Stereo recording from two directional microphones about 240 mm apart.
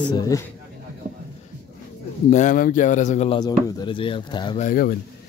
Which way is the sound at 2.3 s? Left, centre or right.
Left.